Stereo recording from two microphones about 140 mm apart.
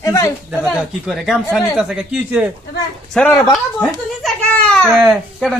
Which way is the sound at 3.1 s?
5° left (ahead or behind).